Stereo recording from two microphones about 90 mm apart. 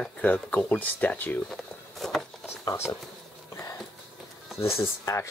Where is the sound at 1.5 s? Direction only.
5° left (ahead or behind).